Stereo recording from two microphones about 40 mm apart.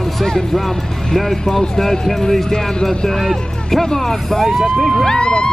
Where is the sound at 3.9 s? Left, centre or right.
Centre.